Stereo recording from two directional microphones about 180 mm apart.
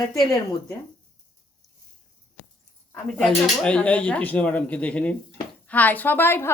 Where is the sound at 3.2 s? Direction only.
5° left (ahead or behind).